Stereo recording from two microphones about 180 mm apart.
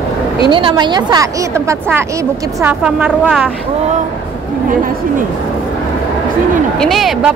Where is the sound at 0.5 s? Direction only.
25° right (ahead or behind); by 3.5 s 10° right (ahead or behind).